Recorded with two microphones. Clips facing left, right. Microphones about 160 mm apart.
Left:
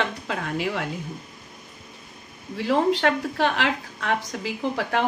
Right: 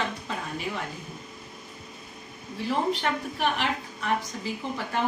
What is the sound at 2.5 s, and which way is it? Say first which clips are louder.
A woman's voice: left 6 dB; 90° left.